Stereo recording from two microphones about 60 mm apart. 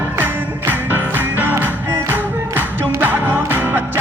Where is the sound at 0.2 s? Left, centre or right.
Right.